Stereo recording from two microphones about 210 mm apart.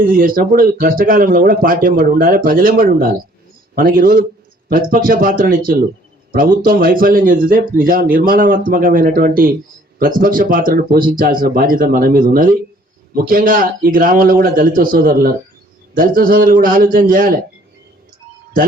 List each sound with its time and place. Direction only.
0.0 s speech: 45° right (ahead or behind)